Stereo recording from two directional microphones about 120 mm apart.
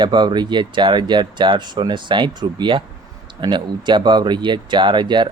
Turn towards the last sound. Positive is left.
turn(degrees=-40)  # may be behind; listen again after turning